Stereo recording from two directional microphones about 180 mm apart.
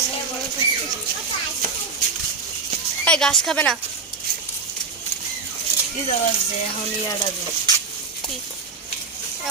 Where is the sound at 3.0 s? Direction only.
5° left (ahead or behind).